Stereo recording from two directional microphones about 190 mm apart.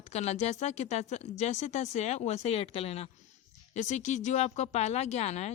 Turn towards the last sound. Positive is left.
turn(degrees=35)  # may be behind; listen again after turning